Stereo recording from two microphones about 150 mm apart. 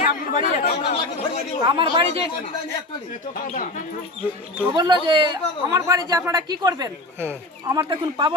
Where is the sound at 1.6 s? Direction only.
35° right (ahead or behind).